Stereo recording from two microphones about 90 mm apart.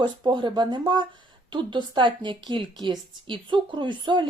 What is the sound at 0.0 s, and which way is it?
A woman's voice, 60° right (ahead or behind).